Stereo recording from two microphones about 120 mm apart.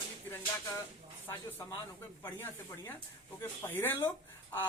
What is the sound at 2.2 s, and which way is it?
Speech, 15° left (ahead or behind).